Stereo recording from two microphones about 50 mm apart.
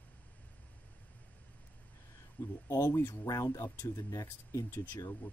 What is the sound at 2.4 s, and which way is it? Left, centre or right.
Speech, left.